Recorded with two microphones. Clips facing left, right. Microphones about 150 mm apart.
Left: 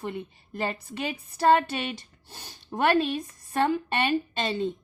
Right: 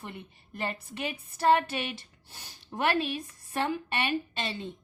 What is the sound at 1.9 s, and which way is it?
Speech, 35° left (ahead or behind).